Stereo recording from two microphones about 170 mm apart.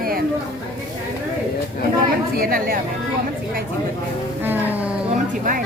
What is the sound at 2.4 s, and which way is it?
Speech, 60° right (ahead or behind).